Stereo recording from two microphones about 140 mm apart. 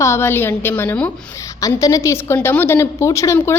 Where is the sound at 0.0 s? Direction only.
20° left (ahead or behind).